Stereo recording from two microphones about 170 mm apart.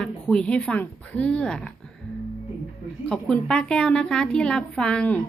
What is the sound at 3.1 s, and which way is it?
A woman's voice, 5° left (ahead or behind).